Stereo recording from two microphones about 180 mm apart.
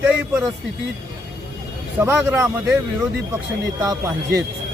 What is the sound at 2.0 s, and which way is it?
Speech, 15° right (ahead or behind).